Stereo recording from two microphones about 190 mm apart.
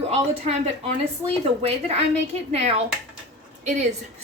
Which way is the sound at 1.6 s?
35° right (ahead or behind).